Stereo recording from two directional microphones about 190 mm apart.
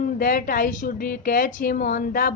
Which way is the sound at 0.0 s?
50° left (ahead or behind).